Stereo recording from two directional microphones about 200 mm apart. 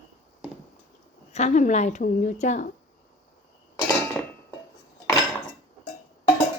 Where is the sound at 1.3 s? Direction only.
35° left (ahead or behind).